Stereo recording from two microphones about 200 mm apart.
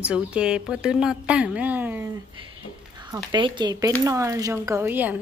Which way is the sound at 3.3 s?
25° right (ahead or behind).